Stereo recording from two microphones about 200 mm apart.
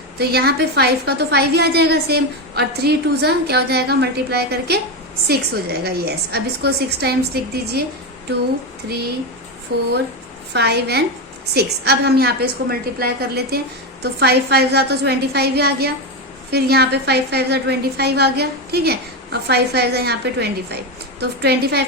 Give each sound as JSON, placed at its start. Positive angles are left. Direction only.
{"t": 0.2, "sound": "a woman's voice", "side_deg": -55}
{"t": 9.7, "sound": "a woman's voice", "side_deg": -55}